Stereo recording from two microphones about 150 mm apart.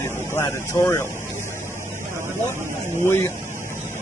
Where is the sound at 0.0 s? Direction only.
20° left (ahead or behind).